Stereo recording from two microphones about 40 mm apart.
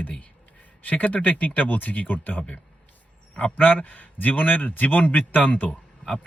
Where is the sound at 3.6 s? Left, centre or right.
Left.